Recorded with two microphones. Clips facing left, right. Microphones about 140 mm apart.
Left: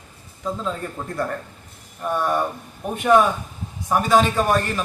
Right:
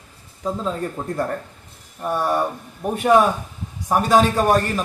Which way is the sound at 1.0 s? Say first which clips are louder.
Right 4 dB; 25° right (ahead or behind).